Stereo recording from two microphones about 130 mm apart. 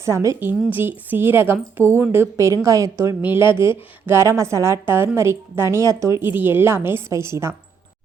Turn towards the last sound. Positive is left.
turn(degrees=-20)  # may be behind; listen again after turning